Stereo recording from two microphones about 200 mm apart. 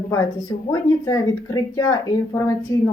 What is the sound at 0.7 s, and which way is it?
Speech, 20° left (ahead or behind).